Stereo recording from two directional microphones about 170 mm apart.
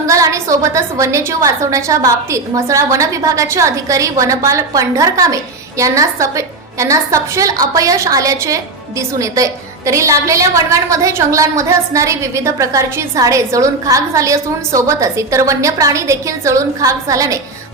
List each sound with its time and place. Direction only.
0.1 s a woman's voice: 20° right (ahead or behind)